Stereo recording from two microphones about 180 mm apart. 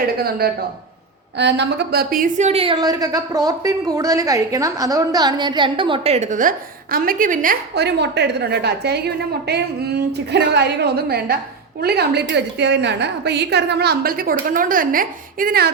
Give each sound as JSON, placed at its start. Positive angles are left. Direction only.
{"t": 0.2, "sound": "a woman's voice", "side_deg": -60}
{"t": 1.4, "sound": "a woman's voice", "side_deg": -75}